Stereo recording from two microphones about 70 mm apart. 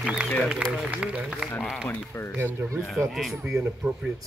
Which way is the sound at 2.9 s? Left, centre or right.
Centre.